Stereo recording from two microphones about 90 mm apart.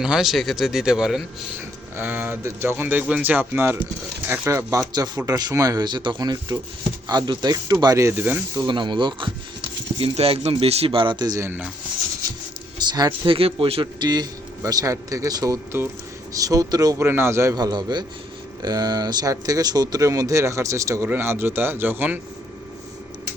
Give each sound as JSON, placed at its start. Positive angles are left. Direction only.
{"t": 0.0, "sound": "speech", "side_deg": -5}
{"t": 2.0, "sound": "speech", "side_deg": -25}
{"t": 4.9, "sound": "speech", "side_deg": -45}
{"t": 8.1, "sound": "speech", "side_deg": -20}
{"t": 8.6, "sound": "speech", "side_deg": -60}
{"t": 13.2, "sound": "a man's voice", "side_deg": -85}
{"t": 14.0, "sound": "speech", "side_deg": -50}
{"t": 14.6, "sound": "speech", "side_deg": -40}
{"t": 15.7, "sound": "speech", "side_deg": -30}
{"t": 16.3, "sound": "speech", "side_deg": -40}
{"t": 17.0, "sound": "speech", "side_deg": -30}
{"t": 17.5, "sound": "speech", "side_deg": -45}